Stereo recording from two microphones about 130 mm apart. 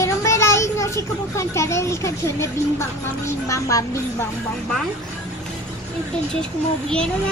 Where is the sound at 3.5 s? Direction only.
25° left (ahead or behind).